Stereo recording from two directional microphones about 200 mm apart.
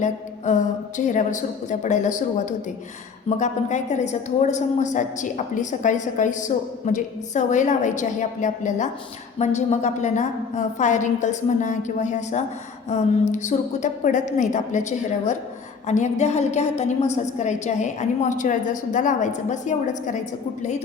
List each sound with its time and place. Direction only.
0.0 s a woman's voice: 40° left (ahead or behind)